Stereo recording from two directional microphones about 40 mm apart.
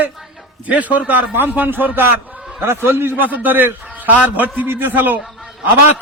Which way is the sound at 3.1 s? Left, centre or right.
Right.